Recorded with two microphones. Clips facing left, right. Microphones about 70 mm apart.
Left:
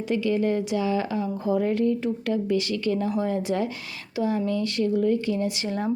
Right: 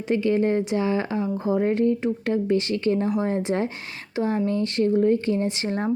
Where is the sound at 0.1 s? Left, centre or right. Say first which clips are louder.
Right 3 dB; right.